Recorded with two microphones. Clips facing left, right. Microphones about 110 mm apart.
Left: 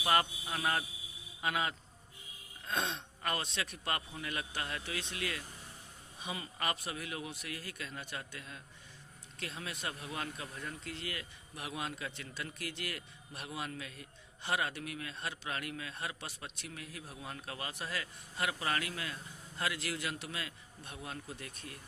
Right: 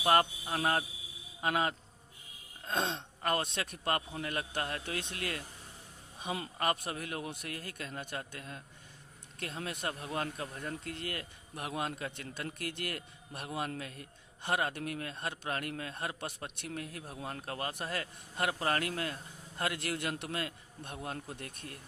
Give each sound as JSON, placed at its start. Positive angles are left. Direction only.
{"t": 0.0, "sound": "speech", "side_deg": -40}
{"t": 2.6, "sound": "gasp", "side_deg": -25}
{"t": 3.2, "sound": "a man's voice", "side_deg": -45}